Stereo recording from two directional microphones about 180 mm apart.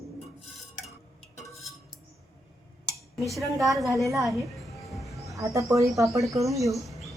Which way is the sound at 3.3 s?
Centre (ahead or behind).